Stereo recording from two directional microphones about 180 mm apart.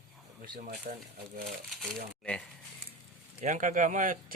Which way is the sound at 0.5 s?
50° right (ahead or behind).